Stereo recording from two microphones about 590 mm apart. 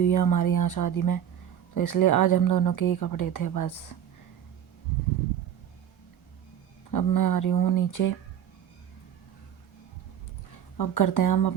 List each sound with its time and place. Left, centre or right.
0.1 s speech: left
6.9 s speech: left
10.8 s speech: left